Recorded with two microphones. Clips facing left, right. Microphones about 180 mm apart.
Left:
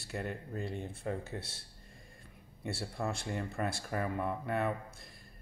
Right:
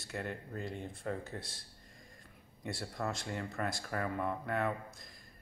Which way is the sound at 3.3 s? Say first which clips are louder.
Left 2 dB; 15° left (ahead or behind).